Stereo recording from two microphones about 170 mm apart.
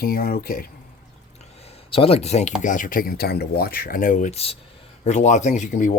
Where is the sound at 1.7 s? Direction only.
35° left (ahead or behind).